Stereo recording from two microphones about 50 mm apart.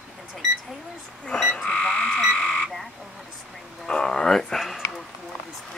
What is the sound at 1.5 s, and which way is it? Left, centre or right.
Frog, left.